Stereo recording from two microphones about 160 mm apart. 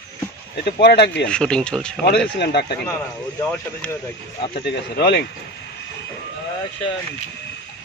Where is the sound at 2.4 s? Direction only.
90° left.